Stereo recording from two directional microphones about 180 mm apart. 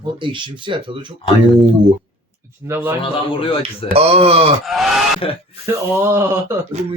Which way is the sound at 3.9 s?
35° right (ahead or behind).